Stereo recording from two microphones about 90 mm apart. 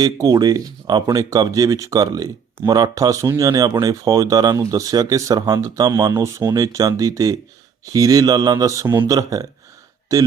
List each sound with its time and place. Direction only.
0.0 s speech: 45° right (ahead or behind)